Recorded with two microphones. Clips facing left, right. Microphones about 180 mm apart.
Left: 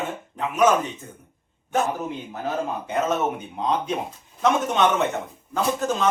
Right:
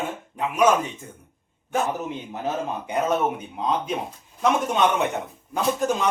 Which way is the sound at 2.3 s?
20° right (ahead or behind).